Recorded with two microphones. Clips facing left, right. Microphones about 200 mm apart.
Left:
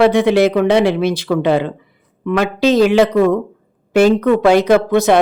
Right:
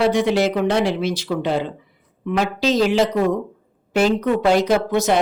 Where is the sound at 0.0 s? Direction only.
60° left (ahead or behind).